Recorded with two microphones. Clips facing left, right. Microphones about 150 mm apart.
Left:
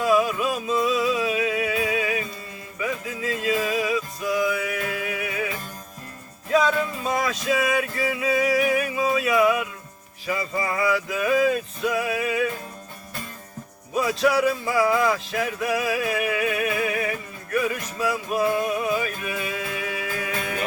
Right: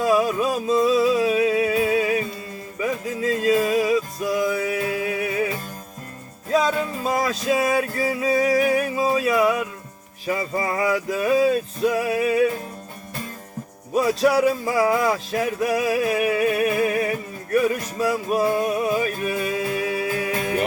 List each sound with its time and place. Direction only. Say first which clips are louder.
0.0 s music: right 2 dB; 40° right (ahead or behind)
6.5 s music: even; 35° right (ahead or behind)
9.0 s a sound: left 1 dB; 35° right (ahead or behind)
10.2 s music: right 2 dB; 40° right (ahead or behind)
13.9 s music: right 3 dB; 40° right (ahead or behind)